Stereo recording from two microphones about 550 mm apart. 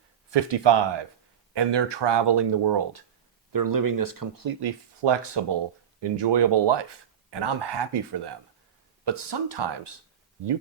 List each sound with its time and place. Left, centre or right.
0.3 s speech: right